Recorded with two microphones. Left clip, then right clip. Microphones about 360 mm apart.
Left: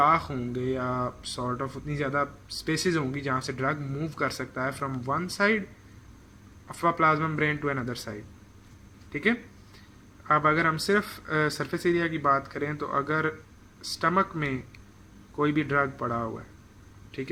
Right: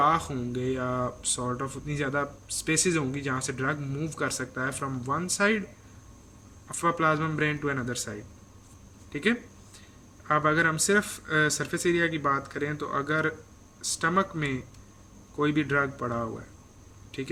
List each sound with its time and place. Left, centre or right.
0.0 s speech: centre
6.7 s speech: centre
9.1 s speech: centre